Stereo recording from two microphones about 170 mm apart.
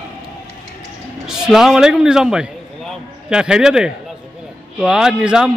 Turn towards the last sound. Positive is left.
turn(degrees=-5)  # may be behind; listen again after turning